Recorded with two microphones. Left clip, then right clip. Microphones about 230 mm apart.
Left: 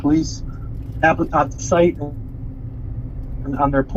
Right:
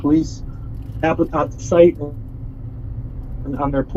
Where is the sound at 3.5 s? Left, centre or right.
Left.